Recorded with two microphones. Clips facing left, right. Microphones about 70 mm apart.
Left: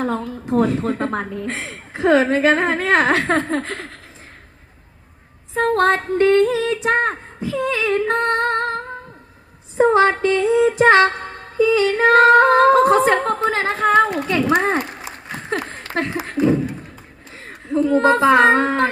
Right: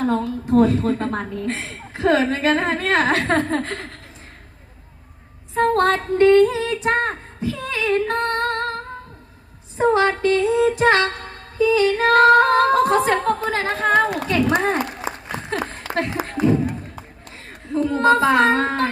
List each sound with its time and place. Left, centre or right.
0.0 s a woman's voice: left
5.5 s a woman's voice: left
7.4 s female singing: left
9.7 s music: left
15.4 s a sound: left
17.7 s music: left